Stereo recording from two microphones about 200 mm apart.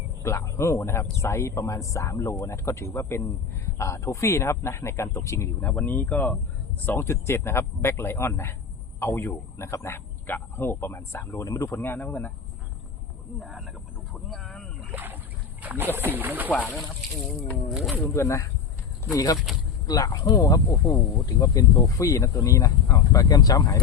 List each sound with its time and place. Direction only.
0.2 s speech: 15° left (ahead or behind)
13.4 s a sound: centre (ahead or behind)
14.9 s boat: 10° right (ahead or behind)
15.6 s speech: 10° right (ahead or behind)
16.5 s a sound: 5° left (ahead or behind)
18.1 s speech: 15° left (ahead or behind)